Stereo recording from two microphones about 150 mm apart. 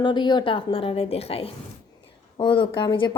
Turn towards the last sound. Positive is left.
turn(degrees=35)  # may be behind; listen again after turning